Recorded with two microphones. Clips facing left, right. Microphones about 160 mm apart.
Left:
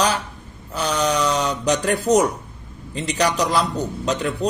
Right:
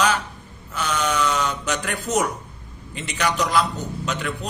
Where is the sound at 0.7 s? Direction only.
35° left (ahead or behind).